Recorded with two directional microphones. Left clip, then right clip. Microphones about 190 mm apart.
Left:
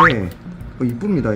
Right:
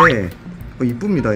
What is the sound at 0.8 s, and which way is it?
Speech, 15° right (ahead or behind).